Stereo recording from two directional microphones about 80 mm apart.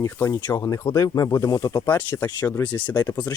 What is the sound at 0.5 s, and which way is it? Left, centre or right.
Speech, left.